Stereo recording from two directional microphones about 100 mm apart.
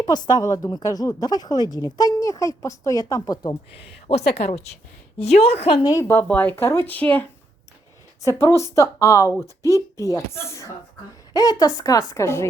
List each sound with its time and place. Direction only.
0.0 s a woman's voice: 40° left (ahead or behind)
4.0 s speech: 90° left
5.8 s speech: 30° left (ahead or behind)
8.2 s a woman's voice: 30° left (ahead or behind)